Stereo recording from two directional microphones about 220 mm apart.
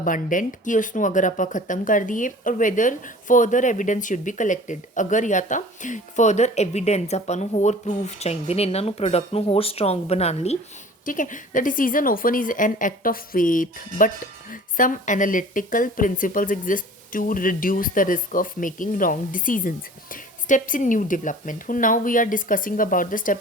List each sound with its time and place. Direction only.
0.0 s speech: 35° left (ahead or behind)